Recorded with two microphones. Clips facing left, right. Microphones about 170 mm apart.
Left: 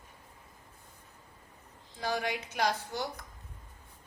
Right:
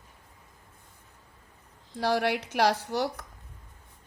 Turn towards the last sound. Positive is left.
turn(degrees=-75)  # may be behind; listen again after turning